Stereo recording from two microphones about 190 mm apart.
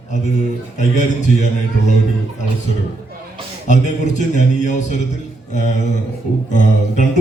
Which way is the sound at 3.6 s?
40° left (ahead or behind).